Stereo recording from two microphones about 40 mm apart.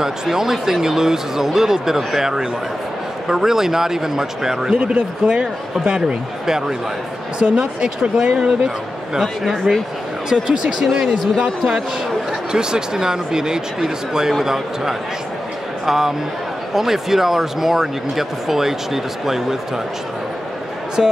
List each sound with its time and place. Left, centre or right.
0.0 s speech: centre
4.7 s speech: right
9.2 s speech: centre
10.6 s speech: centre
21.0 s speech: centre